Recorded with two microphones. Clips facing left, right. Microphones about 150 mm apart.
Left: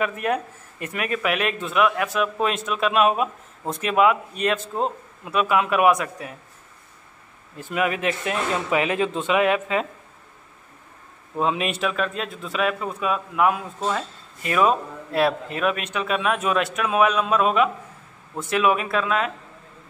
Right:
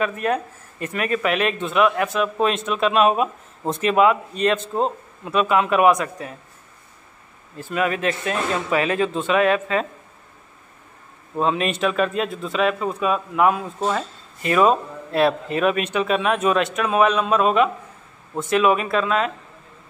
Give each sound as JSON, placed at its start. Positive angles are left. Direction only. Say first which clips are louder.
{"t": 0.0, "sound": "speech", "louder": "right 2 dB", "side_deg": 15}
{"t": 7.5, "sound": "speech", "louder": "right 1 dB", "side_deg": 15}
{"t": 11.3, "sound": "speech", "louder": "right 2 dB", "side_deg": 10}